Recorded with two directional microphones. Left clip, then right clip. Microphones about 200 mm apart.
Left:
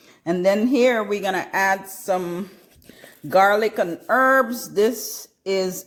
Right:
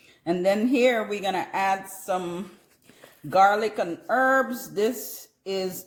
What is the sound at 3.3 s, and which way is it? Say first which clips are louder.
Speech: left 3 dB; 35° left (ahead or behind).